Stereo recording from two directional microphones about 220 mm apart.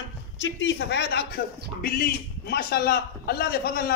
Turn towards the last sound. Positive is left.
turn(degrees=45)  # may be behind; listen again after turning